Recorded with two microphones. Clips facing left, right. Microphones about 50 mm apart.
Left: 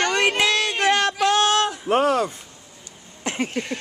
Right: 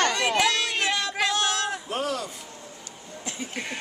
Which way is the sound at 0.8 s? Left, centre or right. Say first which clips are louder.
Left 10 dB; left.